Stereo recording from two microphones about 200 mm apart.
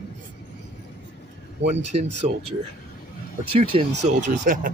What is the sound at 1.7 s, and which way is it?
Speech, 30° right (ahead or behind).